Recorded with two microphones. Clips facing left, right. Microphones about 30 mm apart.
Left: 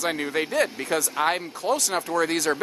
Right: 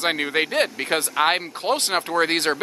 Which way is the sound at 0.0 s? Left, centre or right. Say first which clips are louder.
Right 4 dB; right.